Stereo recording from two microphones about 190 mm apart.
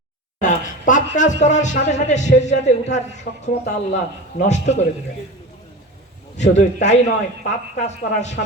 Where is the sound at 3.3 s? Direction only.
50° left (ahead or behind).